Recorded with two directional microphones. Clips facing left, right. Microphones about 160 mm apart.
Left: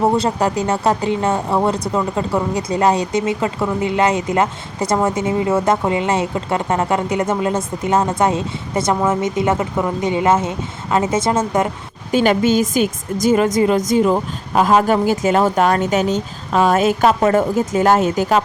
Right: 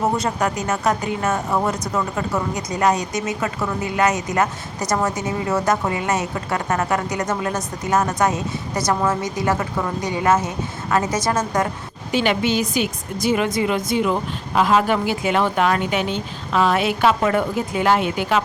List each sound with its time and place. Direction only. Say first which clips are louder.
0.0 s speech: left 4 dB; 30° left (ahead or behind)
12.1 s a woman's voice: left 5 dB; 45° left (ahead or behind)